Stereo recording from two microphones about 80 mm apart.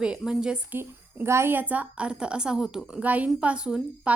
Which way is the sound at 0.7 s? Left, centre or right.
Right.